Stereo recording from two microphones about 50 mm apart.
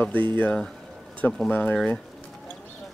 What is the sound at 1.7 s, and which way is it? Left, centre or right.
Speech, left.